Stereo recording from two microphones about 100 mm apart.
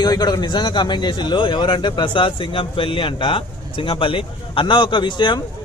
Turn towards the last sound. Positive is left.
turn(degrees=50)  # may be behind; listen again after turning